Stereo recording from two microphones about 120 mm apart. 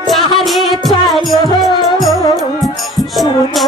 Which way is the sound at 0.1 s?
Centre (ahead or behind).